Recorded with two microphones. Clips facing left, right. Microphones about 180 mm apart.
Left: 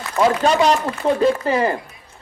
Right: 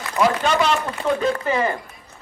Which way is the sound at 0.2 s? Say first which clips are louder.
Left 3 dB; 40° left (ahead or behind).